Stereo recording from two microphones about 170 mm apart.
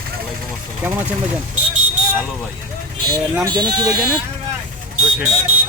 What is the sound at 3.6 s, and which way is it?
Speech, 20° right (ahead or behind).